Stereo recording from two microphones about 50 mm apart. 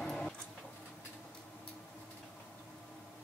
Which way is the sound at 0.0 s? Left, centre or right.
Centre.